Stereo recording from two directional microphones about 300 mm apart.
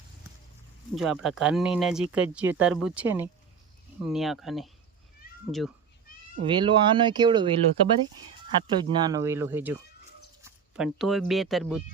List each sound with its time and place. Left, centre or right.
0.9 s speech: centre
6.4 s speech: centre